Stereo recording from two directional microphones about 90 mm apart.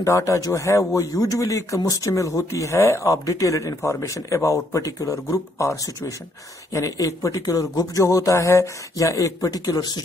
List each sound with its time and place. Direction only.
0.0 s a man's voice: 35° left (ahead or behind)